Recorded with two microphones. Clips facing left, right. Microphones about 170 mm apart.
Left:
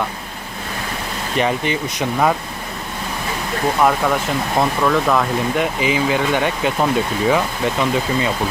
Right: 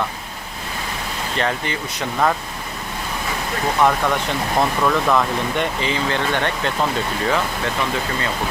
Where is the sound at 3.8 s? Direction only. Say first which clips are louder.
Left 1 dB; 5° left (ahead or behind).